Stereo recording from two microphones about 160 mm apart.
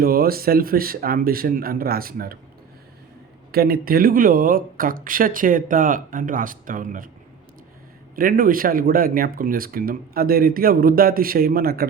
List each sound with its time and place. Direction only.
0.0 s speech: 70° right (ahead or behind)
3.5 s speech: 70° right (ahead or behind)
8.1 s speech: 65° right (ahead or behind)